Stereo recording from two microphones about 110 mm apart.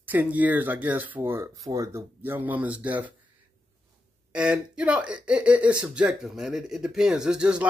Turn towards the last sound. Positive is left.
turn(degrees=-10)  # may be behind; listen again after turning